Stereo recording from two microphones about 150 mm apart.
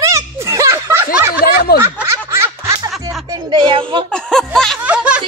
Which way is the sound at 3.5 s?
35° right (ahead or behind).